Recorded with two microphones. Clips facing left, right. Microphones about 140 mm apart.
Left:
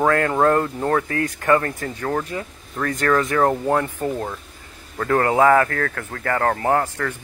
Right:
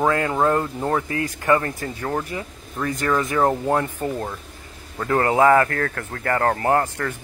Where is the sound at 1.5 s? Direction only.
15° right (ahead or behind).